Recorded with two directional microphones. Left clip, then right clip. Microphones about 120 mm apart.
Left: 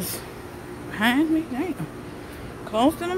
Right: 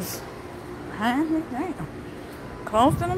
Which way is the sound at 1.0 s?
60° left (ahead or behind).